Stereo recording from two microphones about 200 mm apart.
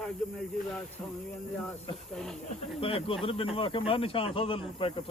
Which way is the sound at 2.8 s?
25° left (ahead or behind).